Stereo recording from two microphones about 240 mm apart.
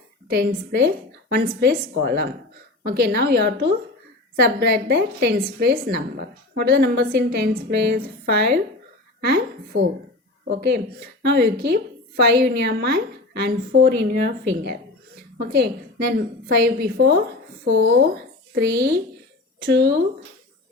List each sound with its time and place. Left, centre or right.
0.3 s a woman's voice: right